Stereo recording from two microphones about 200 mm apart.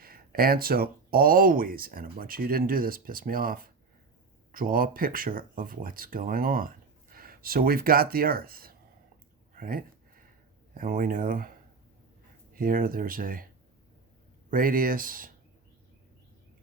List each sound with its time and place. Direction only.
0.0 s speech: 50° right (ahead or behind)
12.5 s speech: 45° right (ahead or behind)
14.5 s speech: 45° right (ahead or behind)